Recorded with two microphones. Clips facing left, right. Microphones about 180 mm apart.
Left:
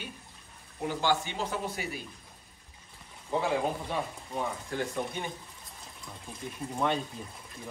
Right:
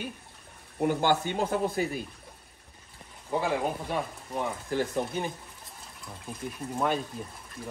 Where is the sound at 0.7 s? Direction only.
50° right (ahead or behind).